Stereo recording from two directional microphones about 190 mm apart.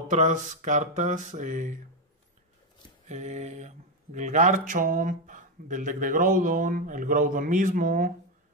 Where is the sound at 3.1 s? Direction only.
40° right (ahead or behind).